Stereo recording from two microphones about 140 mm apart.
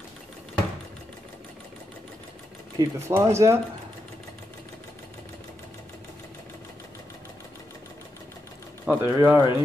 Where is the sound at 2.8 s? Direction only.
25° right (ahead or behind).